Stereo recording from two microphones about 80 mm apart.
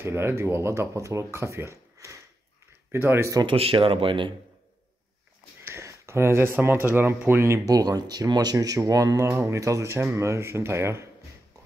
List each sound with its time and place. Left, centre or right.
0.0 s speech: right
3.4 s speech: right
5.6 s speech: right
7.7 s speech: right